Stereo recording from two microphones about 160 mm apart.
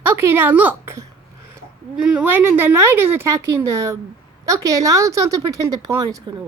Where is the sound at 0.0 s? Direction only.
15° right (ahead or behind).